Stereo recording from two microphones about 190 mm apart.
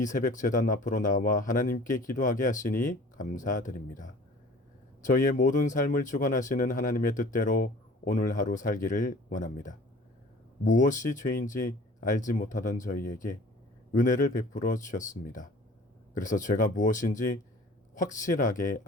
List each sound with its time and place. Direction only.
0.0 s speech: 40° left (ahead or behind)